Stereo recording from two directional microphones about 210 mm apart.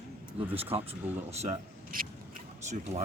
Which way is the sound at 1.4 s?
35° right (ahead or behind).